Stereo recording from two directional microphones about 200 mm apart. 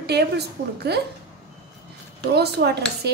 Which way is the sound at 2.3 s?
55° right (ahead or behind).